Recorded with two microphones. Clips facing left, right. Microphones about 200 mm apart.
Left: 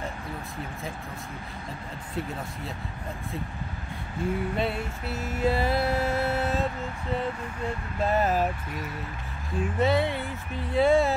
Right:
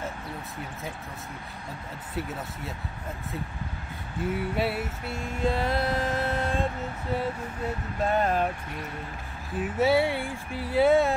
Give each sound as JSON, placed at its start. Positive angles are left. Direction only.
{"t": 4.2, "sound": "music", "side_deg": -5}
{"t": 7.2, "sound": "a sound", "side_deg": -5}
{"t": 9.6, "sound": "speech", "side_deg": -5}